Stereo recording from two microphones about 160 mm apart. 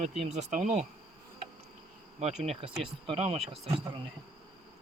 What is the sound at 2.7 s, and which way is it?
Speech, 35° right (ahead or behind).